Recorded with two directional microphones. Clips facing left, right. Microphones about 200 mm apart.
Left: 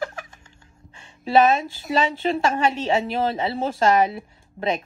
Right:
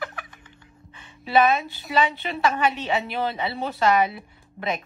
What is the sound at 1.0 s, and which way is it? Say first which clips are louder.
A woman's voice: left 3 dB; 35° left (ahead or behind).